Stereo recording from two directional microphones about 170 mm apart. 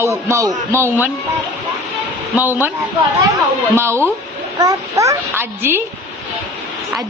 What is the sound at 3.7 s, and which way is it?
Speech, 15° right (ahead or behind).